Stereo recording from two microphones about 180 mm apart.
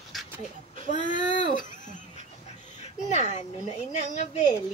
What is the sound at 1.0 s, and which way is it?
Speech, 45° left (ahead or behind).